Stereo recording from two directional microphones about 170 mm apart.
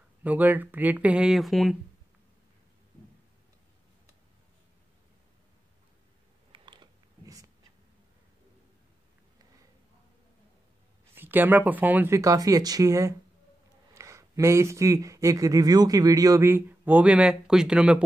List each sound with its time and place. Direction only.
0.2 s speech: 10° right (ahead or behind)
6.5 s a sound: 25° right (ahead or behind)
11.1 s speech: 10° right (ahead or behind)